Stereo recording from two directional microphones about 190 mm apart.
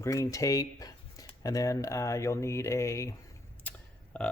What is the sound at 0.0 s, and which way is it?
Speech, 15° left (ahead or behind).